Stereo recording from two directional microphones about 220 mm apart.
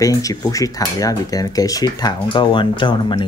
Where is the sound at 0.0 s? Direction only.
15° left (ahead or behind).